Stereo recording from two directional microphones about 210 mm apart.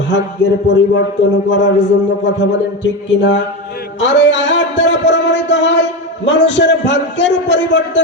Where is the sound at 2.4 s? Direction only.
60° left (ahead or behind).